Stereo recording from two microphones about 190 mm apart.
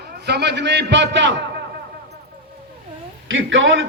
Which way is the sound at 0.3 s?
60° right (ahead or behind).